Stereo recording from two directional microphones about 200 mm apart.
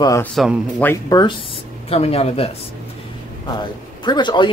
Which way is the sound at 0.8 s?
20° left (ahead or behind).